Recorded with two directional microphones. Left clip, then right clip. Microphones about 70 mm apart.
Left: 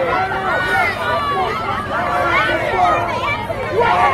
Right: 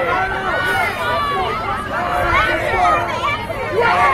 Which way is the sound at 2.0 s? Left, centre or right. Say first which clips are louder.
Left 1 dB; right.